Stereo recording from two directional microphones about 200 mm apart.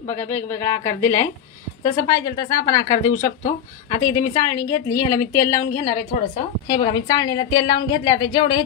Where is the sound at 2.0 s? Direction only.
20° left (ahead or behind).